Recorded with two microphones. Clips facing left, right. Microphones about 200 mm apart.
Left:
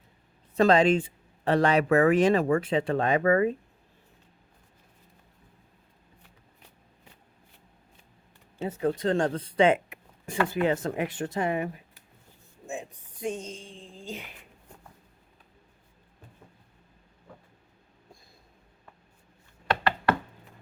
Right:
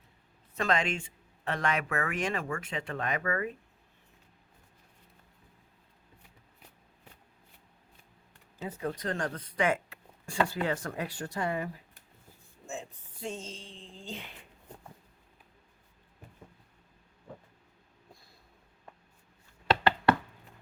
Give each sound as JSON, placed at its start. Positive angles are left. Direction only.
{"t": 0.5, "sound": "speech", "side_deg": 35}
{"t": 8.6, "sound": "a woman's voice", "side_deg": 30}